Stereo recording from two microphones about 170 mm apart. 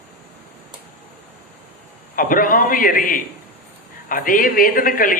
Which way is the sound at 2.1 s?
55° left (ahead or behind).